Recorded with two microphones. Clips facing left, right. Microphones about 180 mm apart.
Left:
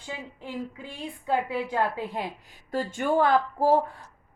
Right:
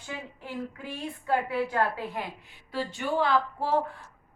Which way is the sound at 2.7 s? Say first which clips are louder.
Left 4 dB; 45° left (ahead or behind).